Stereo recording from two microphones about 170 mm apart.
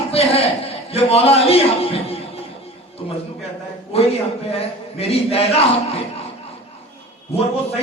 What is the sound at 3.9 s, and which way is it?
Speech, 35° left (ahead or behind).